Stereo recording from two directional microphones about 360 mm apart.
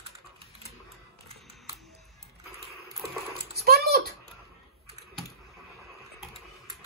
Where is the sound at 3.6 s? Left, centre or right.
Right.